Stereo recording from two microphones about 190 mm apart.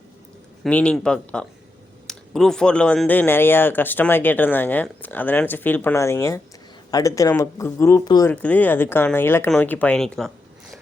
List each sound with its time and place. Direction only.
0.6 s speech: 5° left (ahead or behind)
8.3 s speech: 10° left (ahead or behind)